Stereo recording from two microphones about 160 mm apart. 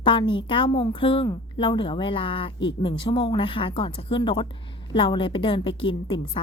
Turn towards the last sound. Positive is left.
turn(degrees=30)  # may be behind; listen again after turning